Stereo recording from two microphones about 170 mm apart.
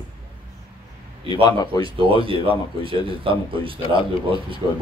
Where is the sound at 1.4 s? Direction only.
25° left (ahead or behind).